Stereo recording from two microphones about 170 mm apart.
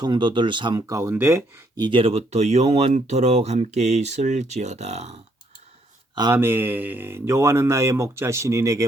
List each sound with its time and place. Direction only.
0.0 s speech: 25° right (ahead or behind)
6.3 s speech: 10° right (ahead or behind)